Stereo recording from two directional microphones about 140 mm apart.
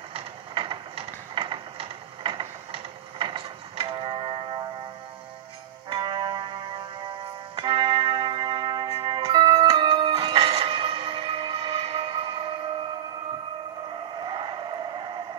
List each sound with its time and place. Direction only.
0.1 s mechanisms: 40° right (ahead or behind)
5.9 s music: 35° right (ahead or behind)
14.2 s vehicle: 35° right (ahead or behind)